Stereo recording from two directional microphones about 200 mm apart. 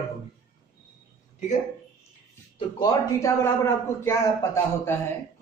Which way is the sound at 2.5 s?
20° left (ahead or behind).